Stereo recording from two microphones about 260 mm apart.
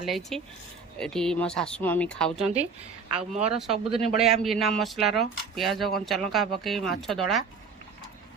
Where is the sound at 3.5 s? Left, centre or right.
Centre.